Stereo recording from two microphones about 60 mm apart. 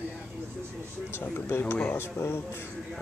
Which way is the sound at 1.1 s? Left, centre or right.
Left.